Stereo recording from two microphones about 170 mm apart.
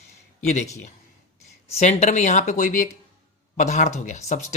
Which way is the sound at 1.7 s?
40° left (ahead or behind).